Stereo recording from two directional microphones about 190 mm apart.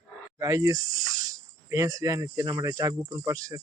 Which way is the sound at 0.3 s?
15° right (ahead or behind).